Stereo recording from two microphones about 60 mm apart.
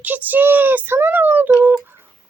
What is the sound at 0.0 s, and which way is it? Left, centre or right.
Speech, right.